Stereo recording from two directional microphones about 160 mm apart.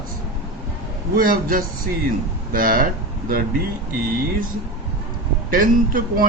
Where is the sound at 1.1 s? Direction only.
65° right (ahead or behind).